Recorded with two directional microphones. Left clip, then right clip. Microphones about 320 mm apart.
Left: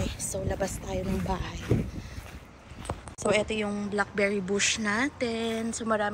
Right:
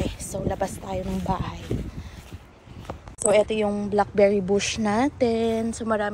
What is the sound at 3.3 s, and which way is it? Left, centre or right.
Speech, centre.